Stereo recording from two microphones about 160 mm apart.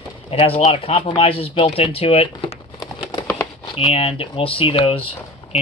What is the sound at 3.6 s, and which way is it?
Speech, 35° left (ahead or behind).